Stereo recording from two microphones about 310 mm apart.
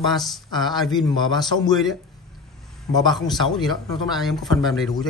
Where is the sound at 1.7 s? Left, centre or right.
Centre.